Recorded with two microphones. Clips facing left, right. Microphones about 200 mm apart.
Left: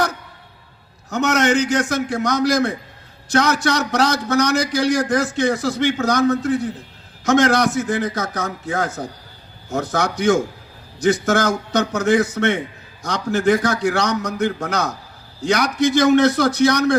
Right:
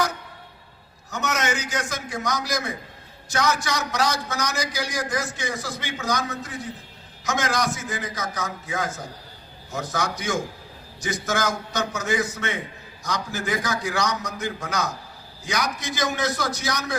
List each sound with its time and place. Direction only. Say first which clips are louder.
1.1 s a man's voice: left 9 dB; 65° left (ahead or behind)
7.3 s a man's voice: left 10 dB; 65° left (ahead or behind)